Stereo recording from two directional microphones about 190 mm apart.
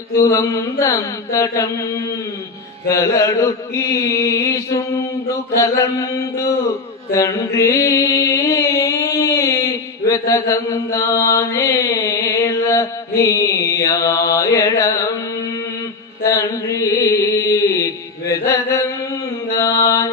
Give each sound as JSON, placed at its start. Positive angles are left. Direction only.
{"t": 0.2, "sound": "mantra", "side_deg": 15}
{"t": 2.9, "sound": "mantra", "side_deg": 15}
{"t": 16.2, "sound": "mantra", "side_deg": 15}